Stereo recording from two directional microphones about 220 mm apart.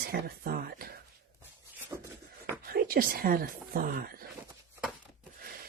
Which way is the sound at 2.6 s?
45° right (ahead or behind).